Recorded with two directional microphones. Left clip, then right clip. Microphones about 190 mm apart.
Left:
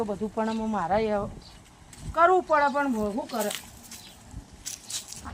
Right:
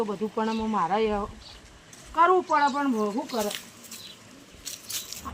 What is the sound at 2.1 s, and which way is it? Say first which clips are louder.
Speech: even; 25° left (ahead or behind).